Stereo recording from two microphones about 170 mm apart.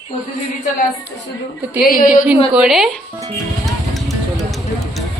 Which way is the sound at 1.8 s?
55° left (ahead or behind).